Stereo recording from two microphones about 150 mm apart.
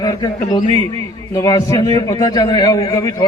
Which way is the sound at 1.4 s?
25° left (ahead or behind).